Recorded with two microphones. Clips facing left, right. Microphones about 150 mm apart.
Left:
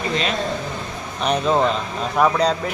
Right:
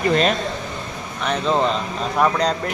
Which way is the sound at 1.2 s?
20° left (ahead or behind).